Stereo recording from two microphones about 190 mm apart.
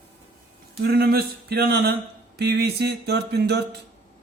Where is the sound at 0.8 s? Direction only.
55° right (ahead or behind).